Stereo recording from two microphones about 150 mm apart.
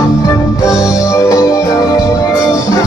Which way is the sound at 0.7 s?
20° left (ahead or behind).